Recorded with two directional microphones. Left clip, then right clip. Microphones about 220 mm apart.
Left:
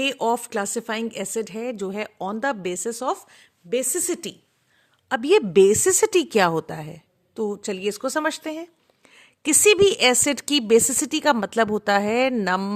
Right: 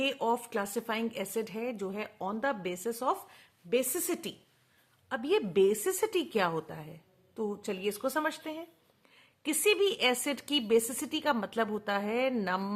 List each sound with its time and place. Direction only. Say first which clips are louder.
0.0 s a woman's voice: left 8 dB; 40° left (ahead or behind)